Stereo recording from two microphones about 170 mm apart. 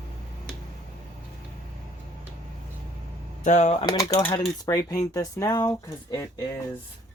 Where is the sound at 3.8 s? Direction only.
20° left (ahead or behind).